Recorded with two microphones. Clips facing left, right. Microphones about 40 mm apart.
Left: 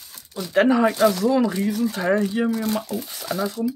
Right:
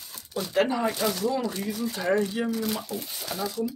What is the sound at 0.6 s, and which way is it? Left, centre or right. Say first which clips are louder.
Speech: left 9 dB; left.